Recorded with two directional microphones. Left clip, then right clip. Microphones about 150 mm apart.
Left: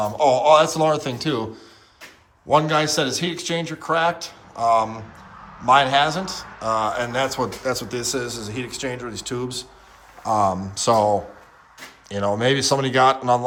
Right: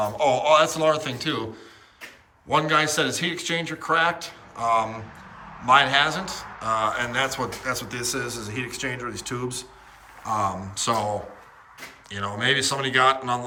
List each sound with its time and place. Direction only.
0.0 s a man's voice: 20° left (ahead or behind)
2.5 s speech: 25° left (ahead or behind)
10.2 s a man's voice: 30° left (ahead or behind)